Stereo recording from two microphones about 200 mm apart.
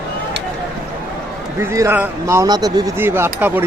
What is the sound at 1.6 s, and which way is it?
Speech, 15° right (ahead or behind).